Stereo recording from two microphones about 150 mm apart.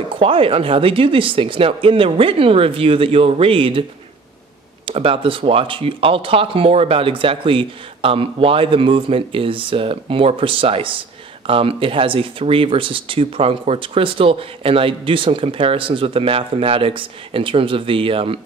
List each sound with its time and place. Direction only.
0.1 s speech: 35° right (ahead or behind)
4.8 s speech: 40° right (ahead or behind)